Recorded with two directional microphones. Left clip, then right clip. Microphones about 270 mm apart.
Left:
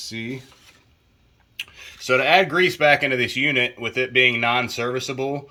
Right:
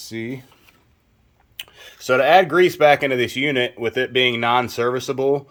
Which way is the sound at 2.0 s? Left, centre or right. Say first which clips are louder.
Right 3 dB; centre.